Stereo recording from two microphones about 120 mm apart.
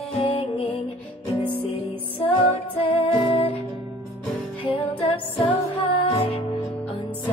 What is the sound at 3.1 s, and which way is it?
Music, 50° left (ahead or behind).